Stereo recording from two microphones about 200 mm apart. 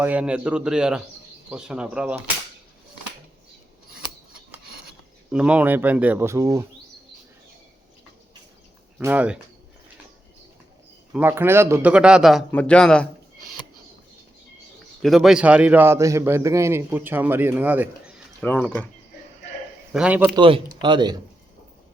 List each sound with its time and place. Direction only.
0.0 s a man's voice: 5° right (ahead or behind)
5.3 s a man's voice: 5° right (ahead or behind)
9.0 s a man's voice: 10° right (ahead or behind)
11.1 s a man's voice: 10° right (ahead or behind)
15.0 s a man's voice: centre (ahead or behind)
18.3 s speech: 10° left (ahead or behind)
19.9 s a man's voice: 5° right (ahead or behind)
20.3 s speech: 25° right (ahead or behind)